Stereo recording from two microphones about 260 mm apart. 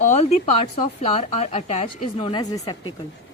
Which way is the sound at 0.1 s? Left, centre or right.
Left.